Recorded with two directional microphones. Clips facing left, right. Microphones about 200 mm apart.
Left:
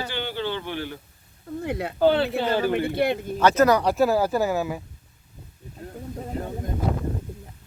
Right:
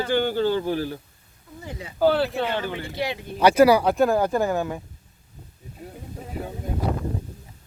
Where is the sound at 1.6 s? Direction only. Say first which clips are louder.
Left 8 dB; 65° left (ahead or behind).